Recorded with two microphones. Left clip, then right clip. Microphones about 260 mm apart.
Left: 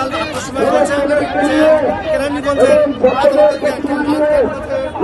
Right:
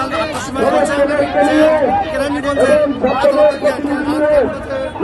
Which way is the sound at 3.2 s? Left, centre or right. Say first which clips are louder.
Right 1 dB; centre.